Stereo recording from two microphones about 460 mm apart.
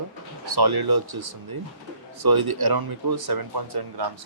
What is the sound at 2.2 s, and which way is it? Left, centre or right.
Speech, right.